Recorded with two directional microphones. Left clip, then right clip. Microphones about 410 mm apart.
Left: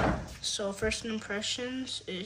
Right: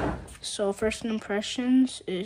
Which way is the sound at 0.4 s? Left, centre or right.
Centre.